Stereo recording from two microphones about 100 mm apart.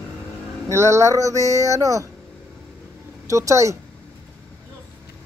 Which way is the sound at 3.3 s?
30° right (ahead or behind).